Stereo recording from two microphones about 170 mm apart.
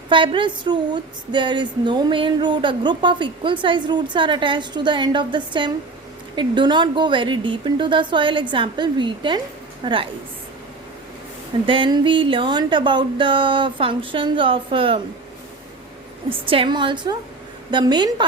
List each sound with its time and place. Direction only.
0.1 s speech: 30° right (ahead or behind)
11.6 s speech: 30° right (ahead or behind)
16.5 s speech: 30° right (ahead or behind)